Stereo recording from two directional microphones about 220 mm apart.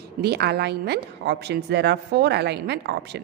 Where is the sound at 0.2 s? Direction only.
45° right (ahead or behind).